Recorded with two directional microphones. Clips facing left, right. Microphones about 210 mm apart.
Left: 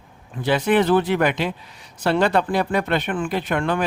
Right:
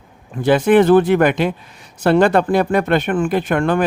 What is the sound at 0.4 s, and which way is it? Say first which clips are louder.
Speech: right 6 dB; 50° right (ahead or behind).